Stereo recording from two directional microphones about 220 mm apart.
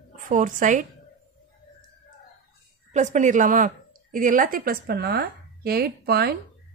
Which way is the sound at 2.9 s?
30° right (ahead or behind).